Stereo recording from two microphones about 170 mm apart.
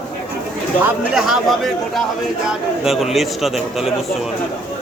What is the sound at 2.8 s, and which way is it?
A man's voice, centre (ahead or behind).